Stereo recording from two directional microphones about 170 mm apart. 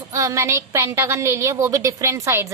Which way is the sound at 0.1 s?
20° right (ahead or behind).